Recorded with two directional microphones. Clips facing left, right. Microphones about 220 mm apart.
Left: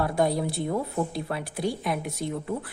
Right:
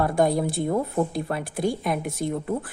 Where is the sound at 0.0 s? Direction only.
50° right (ahead or behind).